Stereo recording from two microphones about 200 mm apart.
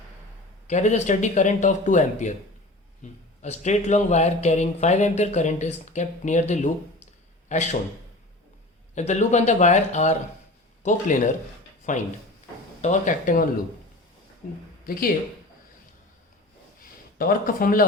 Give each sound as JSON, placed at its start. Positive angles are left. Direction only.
{"t": 0.7, "sound": "a man's voice", "side_deg": 35}
{"t": 9.0, "sound": "speech", "side_deg": 35}
{"t": 14.4, "sound": "speech", "side_deg": 45}
{"t": 17.2, "sound": "speech", "side_deg": 45}